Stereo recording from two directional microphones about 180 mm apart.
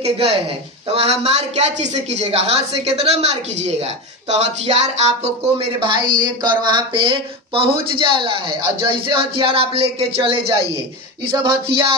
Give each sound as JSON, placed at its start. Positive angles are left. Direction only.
{"t": 0.9, "sound": "a woman's voice", "side_deg": -35}
{"t": 11.4, "sound": "speech", "side_deg": -30}